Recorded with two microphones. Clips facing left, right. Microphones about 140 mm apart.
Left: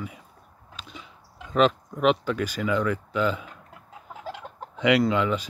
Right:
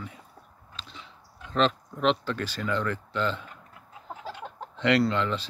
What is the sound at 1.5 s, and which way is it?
Speech, 10° left (ahead or behind).